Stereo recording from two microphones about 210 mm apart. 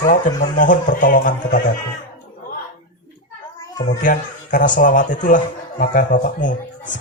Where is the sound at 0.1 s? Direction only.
40° left (ahead or behind).